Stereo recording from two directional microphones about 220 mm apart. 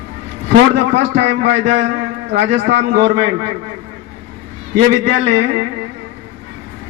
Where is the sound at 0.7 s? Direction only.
55° right (ahead or behind).